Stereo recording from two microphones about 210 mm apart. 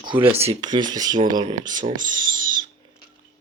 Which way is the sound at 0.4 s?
20° right (ahead or behind).